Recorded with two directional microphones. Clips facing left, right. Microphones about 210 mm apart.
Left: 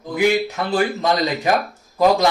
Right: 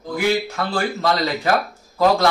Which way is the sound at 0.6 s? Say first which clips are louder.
Left 3 dB; 20° left (ahead or behind).